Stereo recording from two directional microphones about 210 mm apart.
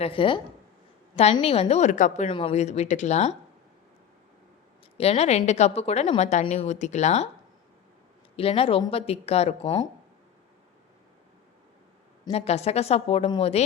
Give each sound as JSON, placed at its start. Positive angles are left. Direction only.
{"t": 0.0, "sound": "a woman's voice", "side_deg": 25}
{"t": 4.9, "sound": "a woman's voice", "side_deg": 30}
{"t": 8.4, "sound": "speech", "side_deg": 30}
{"t": 12.2, "sound": "speech", "side_deg": 30}